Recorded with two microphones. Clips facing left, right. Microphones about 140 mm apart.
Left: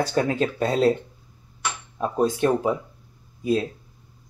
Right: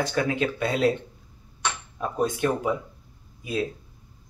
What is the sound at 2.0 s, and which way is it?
Speech, 30° left (ahead or behind).